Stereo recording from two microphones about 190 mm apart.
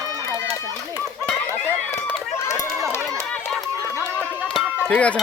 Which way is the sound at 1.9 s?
15° left (ahead or behind).